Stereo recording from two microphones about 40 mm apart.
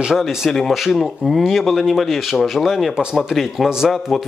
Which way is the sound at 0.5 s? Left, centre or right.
Centre.